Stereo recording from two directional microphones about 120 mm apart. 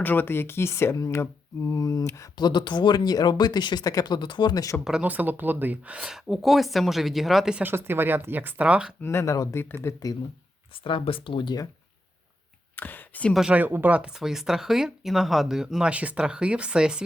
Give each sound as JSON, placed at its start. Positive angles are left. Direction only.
{"t": 0.0, "sound": "speech", "side_deg": 15}
{"t": 2.4, "sound": "speech", "side_deg": 40}
{"t": 4.8, "sound": "speech", "side_deg": -5}
{"t": 7.6, "sound": "speech", "side_deg": -20}
{"t": 9.0, "sound": "speech", "side_deg": 20}
{"t": 10.8, "sound": "speech", "side_deg": 45}
{"t": 12.7, "sound": "a sound", "side_deg": 15}
{"t": 13.3, "sound": "speech", "side_deg": -10}